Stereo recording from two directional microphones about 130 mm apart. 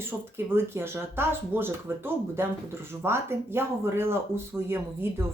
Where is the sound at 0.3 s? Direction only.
20° right (ahead or behind).